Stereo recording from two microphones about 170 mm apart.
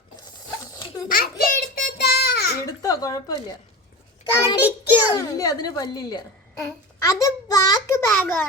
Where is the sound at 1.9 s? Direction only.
70° left (ahead or behind).